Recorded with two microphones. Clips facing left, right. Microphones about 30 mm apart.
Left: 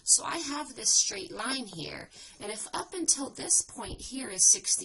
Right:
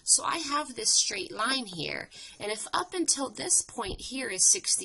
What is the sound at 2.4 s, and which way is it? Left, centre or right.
A woman's voice, right.